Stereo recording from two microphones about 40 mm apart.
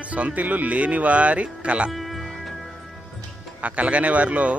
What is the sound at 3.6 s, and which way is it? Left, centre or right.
Speech, right.